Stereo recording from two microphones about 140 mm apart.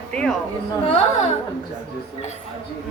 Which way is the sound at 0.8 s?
50° left (ahead or behind).